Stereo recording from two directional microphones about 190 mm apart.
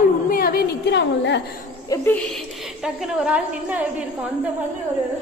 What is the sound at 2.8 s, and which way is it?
A woman's voice, 5° right (ahead or behind).